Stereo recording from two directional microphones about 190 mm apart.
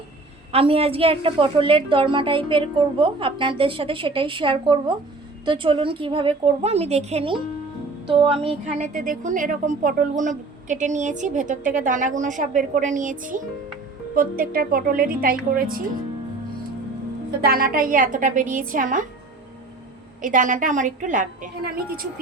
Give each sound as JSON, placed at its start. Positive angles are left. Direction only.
{"t": 0.5, "sound": "a woman's voice", "side_deg": -30}
{"t": 17.4, "sound": "a woman's voice", "side_deg": -50}
{"t": 20.2, "sound": "a woman's voice", "side_deg": -45}